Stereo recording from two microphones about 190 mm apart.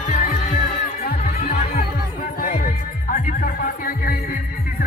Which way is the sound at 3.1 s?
45° left (ahead or behind).